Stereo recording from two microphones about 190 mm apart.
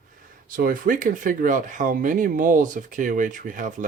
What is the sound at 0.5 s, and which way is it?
Speech, 45° right (ahead or behind).